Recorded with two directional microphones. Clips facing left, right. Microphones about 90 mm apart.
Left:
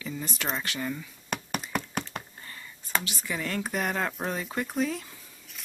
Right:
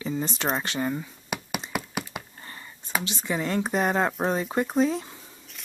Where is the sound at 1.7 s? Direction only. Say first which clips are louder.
Even; 5° right (ahead or behind).